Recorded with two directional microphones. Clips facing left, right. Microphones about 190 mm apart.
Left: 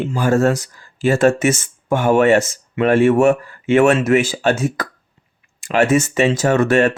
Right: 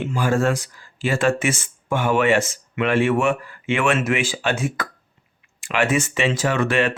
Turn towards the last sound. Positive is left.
turn(degrees=45)  # may be behind; listen again after turning